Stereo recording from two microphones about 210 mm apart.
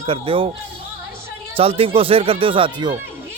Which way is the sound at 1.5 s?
25° right (ahead or behind).